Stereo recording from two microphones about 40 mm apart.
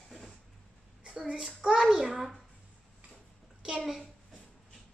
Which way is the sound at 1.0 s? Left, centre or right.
Right.